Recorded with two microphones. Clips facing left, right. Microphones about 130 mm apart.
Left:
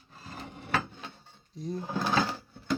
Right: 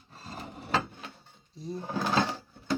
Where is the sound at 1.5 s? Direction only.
Centre (ahead or behind).